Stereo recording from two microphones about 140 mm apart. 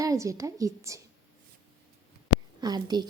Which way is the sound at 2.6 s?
30° right (ahead or behind).